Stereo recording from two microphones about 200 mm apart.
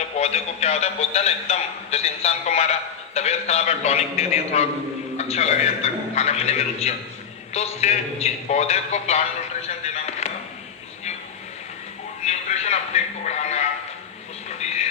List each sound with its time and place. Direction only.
0.2 s a man's voice: 35° left (ahead or behind)
9.8 s music: 35° left (ahead or behind)
12.2 s music: 35° left (ahead or behind)